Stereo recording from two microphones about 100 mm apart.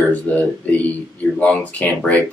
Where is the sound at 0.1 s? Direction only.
15° left (ahead or behind).